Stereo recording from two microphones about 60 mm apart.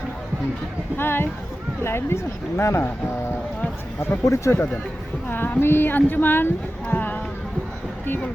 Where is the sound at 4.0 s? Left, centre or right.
Left.